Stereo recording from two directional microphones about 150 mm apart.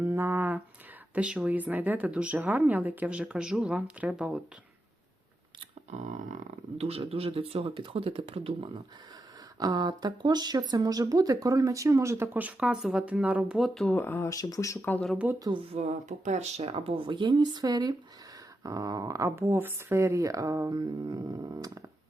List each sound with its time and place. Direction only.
0.0 s a sound: 15° right (ahead or behind)
1.1 s a woman's voice: 10° right (ahead or behind)
6.0 s speech: 50° right (ahead or behind)
9.6 s speech: 25° right (ahead or behind); by 13.9 s centre (ahead or behind)
13.9 s speech: 15° left (ahead or behind)
14.8 s speech: 10° left (ahead or behind)
15.1 s a woman's voice: 10° right (ahead or behind)
15.7 s speech: 50° right (ahead or behind); by 21.8 s 25° right (ahead or behind)